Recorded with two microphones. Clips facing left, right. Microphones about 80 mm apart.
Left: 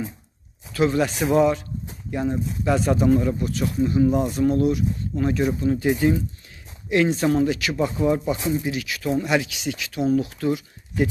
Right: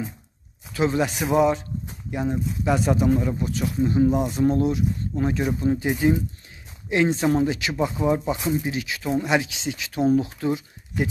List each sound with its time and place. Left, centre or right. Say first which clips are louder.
0.7 s speech: left 2 dB; centre